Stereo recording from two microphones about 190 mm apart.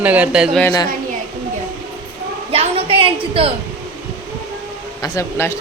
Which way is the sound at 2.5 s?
30° right (ahead or behind).